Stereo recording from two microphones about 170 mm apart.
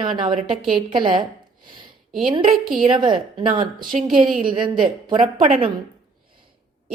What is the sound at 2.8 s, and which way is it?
A woman's voice, 30° right (ahead or behind).